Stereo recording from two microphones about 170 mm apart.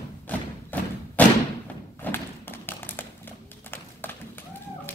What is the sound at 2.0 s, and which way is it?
Tap, 10° left (ahead or behind).